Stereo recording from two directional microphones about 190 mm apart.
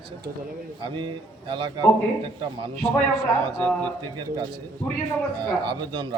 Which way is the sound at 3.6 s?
5° left (ahead or behind).